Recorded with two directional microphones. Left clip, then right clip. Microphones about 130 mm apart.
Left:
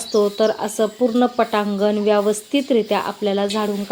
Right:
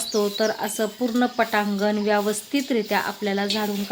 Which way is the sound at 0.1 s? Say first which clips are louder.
Left 6 dB; 5° left (ahead or behind).